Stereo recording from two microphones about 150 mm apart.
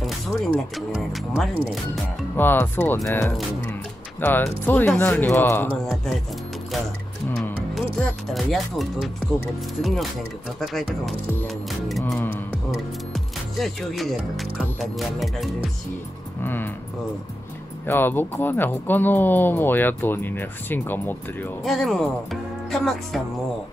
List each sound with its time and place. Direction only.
0.0 s speech: centre (ahead or behind)
2.3 s speech: 15° left (ahead or behind)
8.4 s speech: centre (ahead or behind)
16.4 s speech: 15° left (ahead or behind)
17.8 s speech: 15° left (ahead or behind)
21.6 s speech: centre (ahead or behind)